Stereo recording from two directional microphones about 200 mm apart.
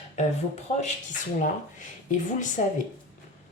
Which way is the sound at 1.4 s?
40° left (ahead or behind).